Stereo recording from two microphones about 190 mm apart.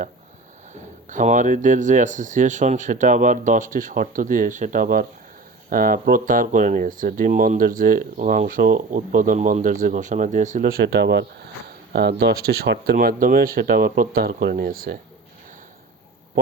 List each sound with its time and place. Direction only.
0.7 s speech: 40° right (ahead or behind)